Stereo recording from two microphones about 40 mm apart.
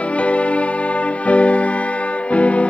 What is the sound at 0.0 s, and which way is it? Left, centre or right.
Music, left.